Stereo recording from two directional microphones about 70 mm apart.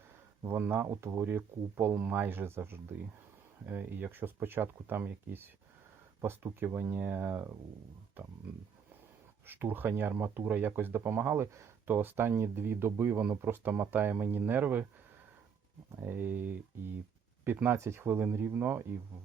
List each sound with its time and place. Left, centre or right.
0.5 s speech: right
9.5 s speech: right
16.0 s speech: right
17.7 s speech: right